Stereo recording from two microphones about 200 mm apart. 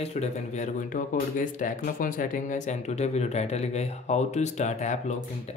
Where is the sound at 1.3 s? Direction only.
40° left (ahead or behind).